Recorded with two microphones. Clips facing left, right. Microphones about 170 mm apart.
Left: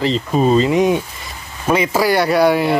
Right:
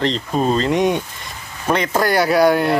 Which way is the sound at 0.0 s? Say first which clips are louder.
Left 3 dB; 5° left (ahead or behind).